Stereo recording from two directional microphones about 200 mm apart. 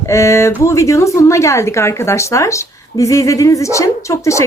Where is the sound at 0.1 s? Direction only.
15° left (ahead or behind).